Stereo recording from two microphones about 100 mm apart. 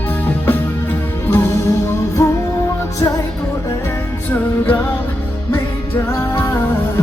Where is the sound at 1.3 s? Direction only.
25° left (ahead or behind).